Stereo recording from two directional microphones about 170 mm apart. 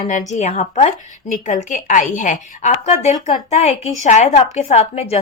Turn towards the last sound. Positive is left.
turn(degrees=40)  # may be behind; listen again after turning